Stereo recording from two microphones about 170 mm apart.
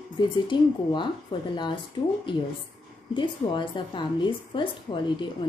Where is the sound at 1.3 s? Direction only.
30° left (ahead or behind).